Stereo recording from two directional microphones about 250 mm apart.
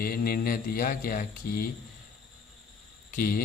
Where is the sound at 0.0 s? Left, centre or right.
Left.